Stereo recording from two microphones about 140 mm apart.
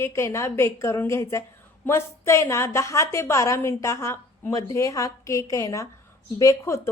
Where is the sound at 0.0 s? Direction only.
20° left (ahead or behind).